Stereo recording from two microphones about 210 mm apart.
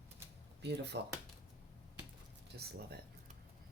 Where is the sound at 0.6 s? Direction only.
55° right (ahead or behind).